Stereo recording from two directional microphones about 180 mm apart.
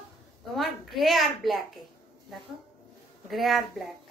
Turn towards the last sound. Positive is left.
turn(degrees=0)  # may be behind; listen again after turning